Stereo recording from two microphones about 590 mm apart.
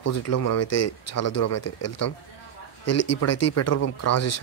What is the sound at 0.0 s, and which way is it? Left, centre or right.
Speech, left.